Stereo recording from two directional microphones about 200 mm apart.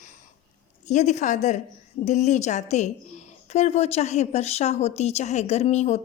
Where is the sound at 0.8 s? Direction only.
35° left (ahead or behind).